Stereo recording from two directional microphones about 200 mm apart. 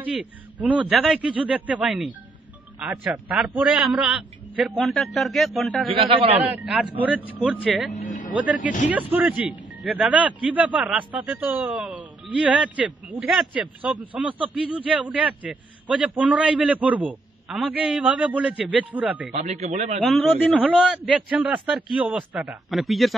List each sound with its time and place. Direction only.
0.0 s a man's voice: 5° right (ahead or behind)
5.9 s a man's voice: 25° right (ahead or behind)
6.5 s a man's voice: 5° right (ahead or behind)
7.9 s speech: 40° left (ahead or behind)
8.9 s a man's voice: 10° right (ahead or behind)
19.3 s speech: 35° right (ahead or behind)
20.0 s a man's voice: centre (ahead or behind)